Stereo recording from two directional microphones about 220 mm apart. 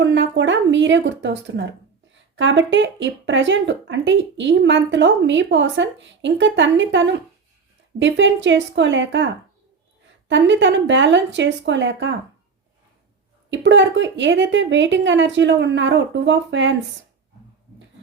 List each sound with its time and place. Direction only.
0.0 s speech: 55° right (ahead or behind)
13.5 s speech: 55° right (ahead or behind)